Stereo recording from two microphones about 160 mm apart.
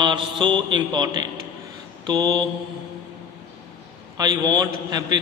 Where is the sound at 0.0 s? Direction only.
30° right (ahead or behind).